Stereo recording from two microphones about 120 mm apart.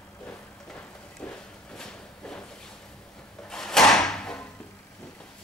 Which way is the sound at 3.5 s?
5° left (ahead or behind).